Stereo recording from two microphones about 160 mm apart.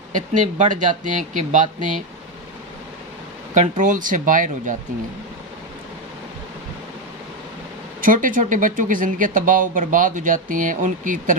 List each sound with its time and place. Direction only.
0.1 s speech: 50° right (ahead or behind)
3.5 s speech: 50° right (ahead or behind)
8.0 s speech: 55° right (ahead or behind)